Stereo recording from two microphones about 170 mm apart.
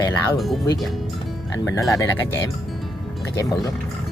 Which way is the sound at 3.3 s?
20° left (ahead or behind).